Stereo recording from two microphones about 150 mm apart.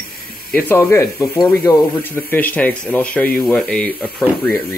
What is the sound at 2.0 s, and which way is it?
Speech, 10° left (ahead or behind).